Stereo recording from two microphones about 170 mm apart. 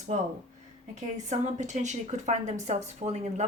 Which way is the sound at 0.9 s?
45° right (ahead or behind).